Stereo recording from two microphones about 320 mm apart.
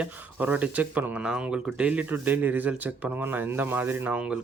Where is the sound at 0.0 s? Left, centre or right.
Centre.